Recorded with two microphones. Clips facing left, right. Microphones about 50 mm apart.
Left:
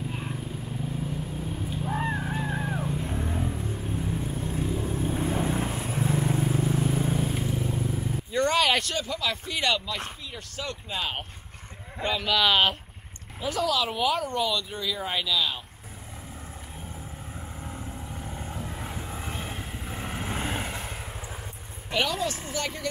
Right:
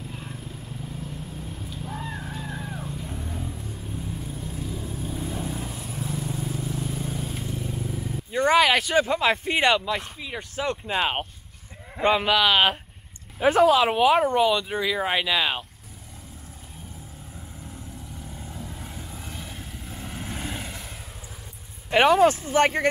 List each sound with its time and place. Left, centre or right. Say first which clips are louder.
0.1 s vehicle: left 4 dB; left
7.3 s vehicle: left 3 dB; centre
8.3 s a sound: right 4 dB; centre
8.9 s speech: right 9 dB; right
12.4 s speech: right 2 dB; centre
13.4 s speech: right 9 dB; right
17.6 s vehicle: left 2 dB; left
21.9 s speech: right 10 dB; right